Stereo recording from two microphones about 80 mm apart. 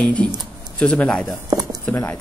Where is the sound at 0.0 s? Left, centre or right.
Centre.